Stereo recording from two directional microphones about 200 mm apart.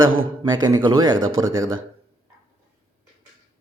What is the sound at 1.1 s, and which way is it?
Speech, 80° right.